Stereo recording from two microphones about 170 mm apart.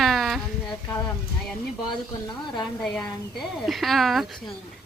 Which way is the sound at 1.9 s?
25° left (ahead or behind).